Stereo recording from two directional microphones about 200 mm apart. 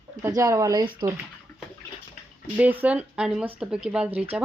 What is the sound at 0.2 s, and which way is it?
Speech, 15° right (ahead or behind).